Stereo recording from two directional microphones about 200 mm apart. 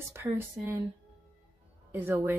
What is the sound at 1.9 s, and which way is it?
Speech, 10° right (ahead or behind).